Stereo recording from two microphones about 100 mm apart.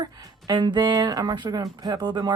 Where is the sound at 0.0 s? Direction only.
45° right (ahead or behind).